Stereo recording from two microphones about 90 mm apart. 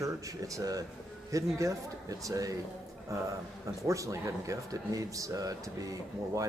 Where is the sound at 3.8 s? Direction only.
35° right (ahead or behind).